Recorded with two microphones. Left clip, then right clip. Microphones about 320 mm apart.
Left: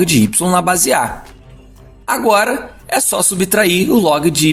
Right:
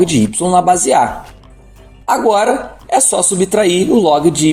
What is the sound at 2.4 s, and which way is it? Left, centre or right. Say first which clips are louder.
Speech: right 3 dB; left.